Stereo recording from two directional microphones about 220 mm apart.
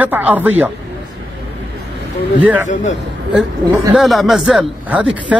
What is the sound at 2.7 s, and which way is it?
Speech, 35° left (ahead or behind).